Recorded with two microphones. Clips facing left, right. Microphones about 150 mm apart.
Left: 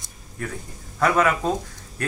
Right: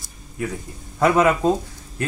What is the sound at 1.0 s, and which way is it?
Speech, 20° right (ahead or behind).